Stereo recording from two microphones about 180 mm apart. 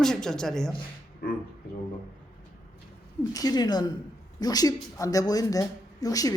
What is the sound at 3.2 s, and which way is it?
Speech, 20° left (ahead or behind).